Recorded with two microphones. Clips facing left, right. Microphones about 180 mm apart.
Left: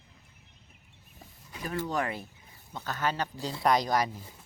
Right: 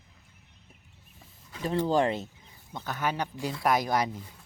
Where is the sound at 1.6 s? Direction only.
25° right (ahead or behind).